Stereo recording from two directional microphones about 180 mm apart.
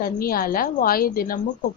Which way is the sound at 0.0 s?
55° left (ahead or behind).